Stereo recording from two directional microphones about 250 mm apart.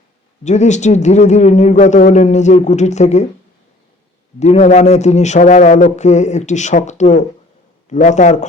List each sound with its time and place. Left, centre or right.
0.4 s speech: left
4.4 s speech: left